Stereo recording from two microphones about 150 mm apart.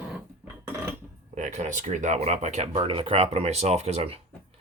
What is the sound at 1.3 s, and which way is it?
Speech, 55° right (ahead or behind).